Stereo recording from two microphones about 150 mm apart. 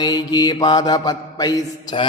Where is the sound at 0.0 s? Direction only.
25° left (ahead or behind).